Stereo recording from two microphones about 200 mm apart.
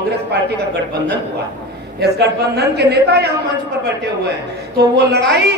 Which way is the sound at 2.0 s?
55° right (ahead or behind).